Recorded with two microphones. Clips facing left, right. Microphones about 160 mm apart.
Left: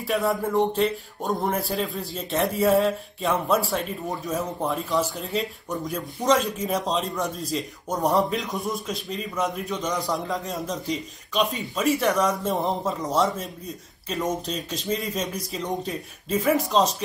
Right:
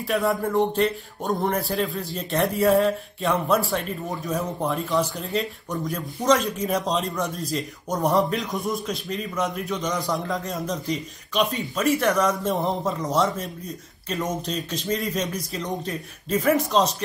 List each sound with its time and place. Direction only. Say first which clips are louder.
0.0 s speech: right 1 dB; centre (ahead or behind)